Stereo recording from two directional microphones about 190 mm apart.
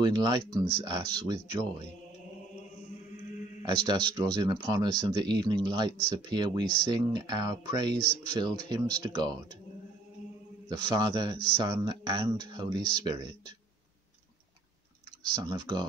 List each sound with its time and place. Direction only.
0.0 s speech: 20° right (ahead or behind)
3.6 s speech: 25° right (ahead or behind)
10.7 s speech: 20° right (ahead or behind)
15.3 s speech: 20° right (ahead or behind)